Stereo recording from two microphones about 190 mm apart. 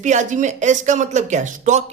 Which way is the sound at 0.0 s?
40° right (ahead or behind).